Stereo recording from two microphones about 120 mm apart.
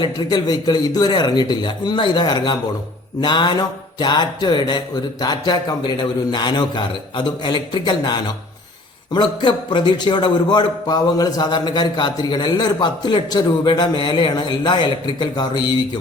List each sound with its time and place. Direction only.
0.0 s a man's voice: 35° left (ahead or behind)